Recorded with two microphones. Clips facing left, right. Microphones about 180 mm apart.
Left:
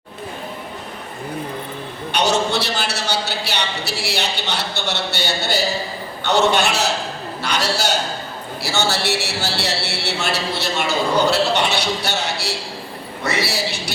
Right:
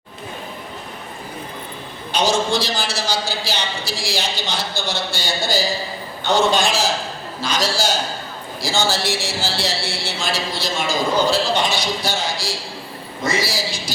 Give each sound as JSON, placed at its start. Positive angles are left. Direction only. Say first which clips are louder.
{"t": 2.1, "sound": "a man's voice", "louder": "even", "side_deg": 65}